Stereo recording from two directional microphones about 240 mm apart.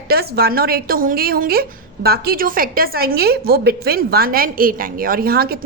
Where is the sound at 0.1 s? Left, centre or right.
Right.